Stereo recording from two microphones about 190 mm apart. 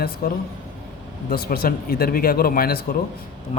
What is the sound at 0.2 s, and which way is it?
A man's voice, 55° left (ahead or behind).